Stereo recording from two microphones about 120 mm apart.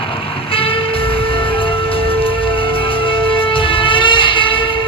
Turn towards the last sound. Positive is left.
turn(degrees=45)  # may be behind; listen again after turning